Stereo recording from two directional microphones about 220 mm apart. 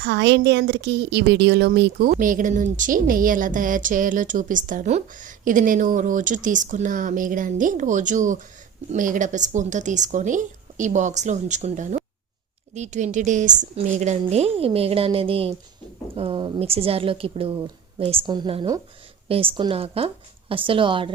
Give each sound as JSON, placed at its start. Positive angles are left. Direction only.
{"t": 0.0, "sound": "a woman's voice", "side_deg": -50}